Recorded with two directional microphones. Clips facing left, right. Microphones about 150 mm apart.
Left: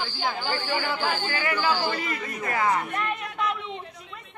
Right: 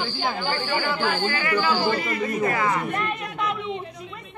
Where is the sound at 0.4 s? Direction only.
20° left (ahead or behind).